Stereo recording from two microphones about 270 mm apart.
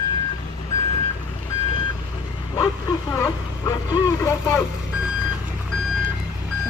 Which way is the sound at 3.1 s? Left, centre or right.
Centre.